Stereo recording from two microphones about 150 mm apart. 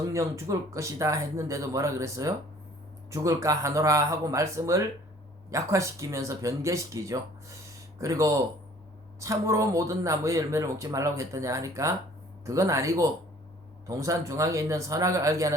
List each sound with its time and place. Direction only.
0.0 s speech: 20° right (ahead or behind)